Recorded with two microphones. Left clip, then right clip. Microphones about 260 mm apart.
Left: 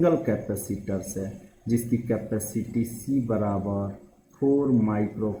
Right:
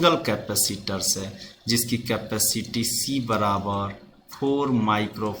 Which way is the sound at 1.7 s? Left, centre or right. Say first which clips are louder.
Right 2 dB; right.